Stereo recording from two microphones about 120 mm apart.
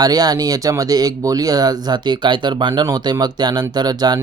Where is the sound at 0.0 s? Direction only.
35° right (ahead or behind).